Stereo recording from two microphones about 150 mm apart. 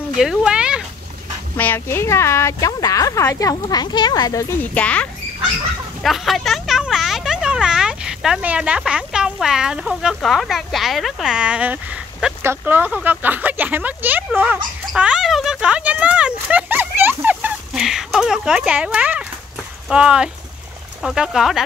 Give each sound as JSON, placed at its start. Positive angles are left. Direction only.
{"t": 0.2, "sound": "speech", "side_deg": -5}
{"t": 1.6, "sound": "speech", "side_deg": 15}
{"t": 14.9, "sound": "a sound", "side_deg": -5}
{"t": 19.9, "sound": "speech", "side_deg": -5}